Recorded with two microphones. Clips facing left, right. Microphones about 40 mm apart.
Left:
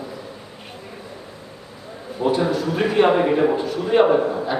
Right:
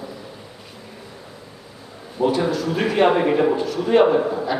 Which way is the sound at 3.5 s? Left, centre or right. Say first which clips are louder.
Even; centre.